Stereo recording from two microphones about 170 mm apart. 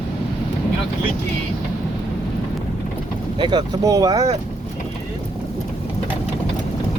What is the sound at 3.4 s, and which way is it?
Speech, 25° right (ahead or behind).